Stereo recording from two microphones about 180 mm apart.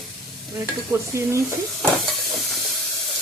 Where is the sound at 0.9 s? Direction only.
15° right (ahead or behind).